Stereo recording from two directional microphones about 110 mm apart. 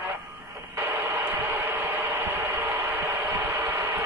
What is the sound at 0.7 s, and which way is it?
Radio, 20° right (ahead or behind).